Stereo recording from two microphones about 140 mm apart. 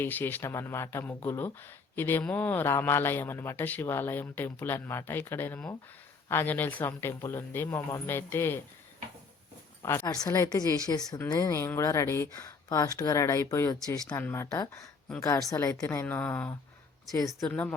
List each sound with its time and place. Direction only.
0.0 s speech: 15° left (ahead or behind)
9.8 s a woman's voice: 20° left (ahead or behind)
17.1 s a woman's voice: 25° left (ahead or behind)
17.5 s speech: 15° left (ahead or behind)